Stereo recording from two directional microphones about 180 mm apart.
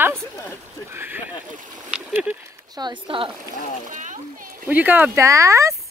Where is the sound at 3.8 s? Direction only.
45° right (ahead or behind).